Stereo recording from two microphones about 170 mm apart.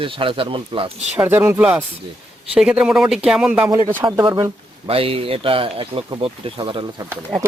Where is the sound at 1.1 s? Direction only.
10° right (ahead or behind).